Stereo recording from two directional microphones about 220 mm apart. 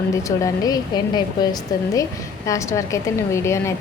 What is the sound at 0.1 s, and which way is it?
A woman's voice, 15° left (ahead or behind).